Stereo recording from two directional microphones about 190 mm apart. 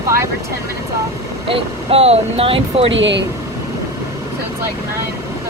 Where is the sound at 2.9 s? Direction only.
75° right (ahead or behind).